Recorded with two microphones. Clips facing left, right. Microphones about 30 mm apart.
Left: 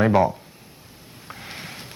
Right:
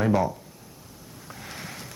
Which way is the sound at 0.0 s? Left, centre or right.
Left.